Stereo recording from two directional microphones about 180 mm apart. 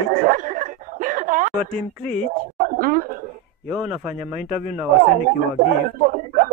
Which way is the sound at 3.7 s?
5° right (ahead or behind).